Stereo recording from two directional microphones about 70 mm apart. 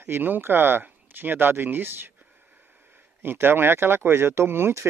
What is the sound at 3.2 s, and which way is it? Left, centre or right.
Speech, right.